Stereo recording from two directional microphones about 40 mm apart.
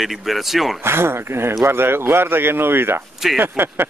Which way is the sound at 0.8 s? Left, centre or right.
Right.